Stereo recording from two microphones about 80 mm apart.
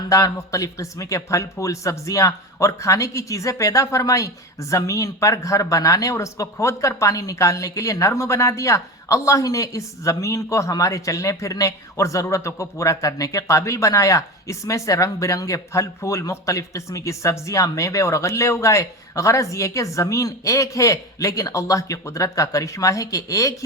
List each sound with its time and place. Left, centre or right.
0.1 s speech: left